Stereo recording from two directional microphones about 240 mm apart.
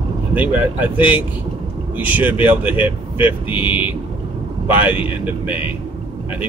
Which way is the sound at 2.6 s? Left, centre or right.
Left.